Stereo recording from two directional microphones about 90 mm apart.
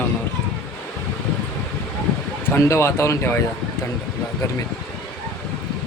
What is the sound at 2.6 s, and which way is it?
Speech, 30° left (ahead or behind).